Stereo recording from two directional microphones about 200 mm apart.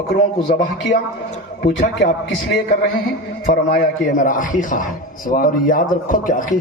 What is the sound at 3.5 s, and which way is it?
A man's voice, 45° left (ahead or behind).